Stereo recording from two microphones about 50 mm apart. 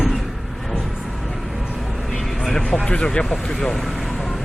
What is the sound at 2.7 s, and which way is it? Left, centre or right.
Speech, centre.